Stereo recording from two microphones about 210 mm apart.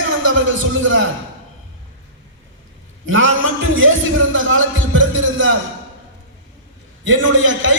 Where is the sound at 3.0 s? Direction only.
70° right (ahead or behind).